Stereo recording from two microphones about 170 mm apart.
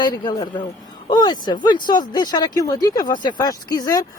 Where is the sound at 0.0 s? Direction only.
25° left (ahead or behind).